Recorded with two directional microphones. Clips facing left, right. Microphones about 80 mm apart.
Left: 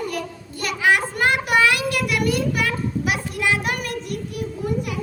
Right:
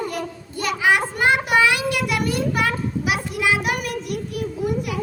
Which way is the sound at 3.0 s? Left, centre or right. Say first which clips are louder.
Right 2 dB; centre.